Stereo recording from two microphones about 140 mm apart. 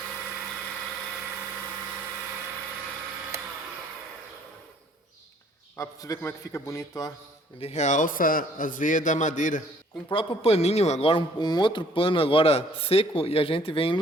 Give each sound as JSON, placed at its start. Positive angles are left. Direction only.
{"t": 5.7, "sound": "a man's voice", "side_deg": 25}
{"t": 7.6, "sound": "a man's voice", "side_deg": 50}
{"t": 10.1, "sound": "speech", "side_deg": 40}